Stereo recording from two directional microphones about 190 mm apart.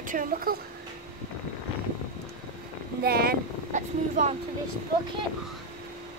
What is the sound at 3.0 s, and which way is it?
Speech, 55° right (ahead or behind).